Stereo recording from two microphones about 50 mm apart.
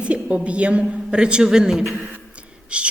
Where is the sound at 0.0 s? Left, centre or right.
Right.